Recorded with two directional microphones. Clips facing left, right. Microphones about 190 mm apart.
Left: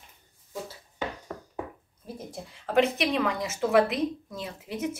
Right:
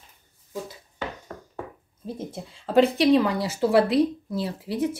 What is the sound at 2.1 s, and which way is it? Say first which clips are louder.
Speech: right 5 dB; 25° right (ahead or behind).